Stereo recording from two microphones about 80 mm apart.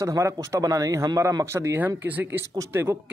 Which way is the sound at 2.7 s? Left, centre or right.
Right.